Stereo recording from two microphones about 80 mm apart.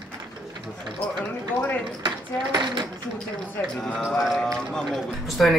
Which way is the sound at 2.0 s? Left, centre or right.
Right.